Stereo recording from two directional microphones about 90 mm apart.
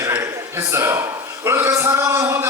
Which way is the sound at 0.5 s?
30° right (ahead or behind).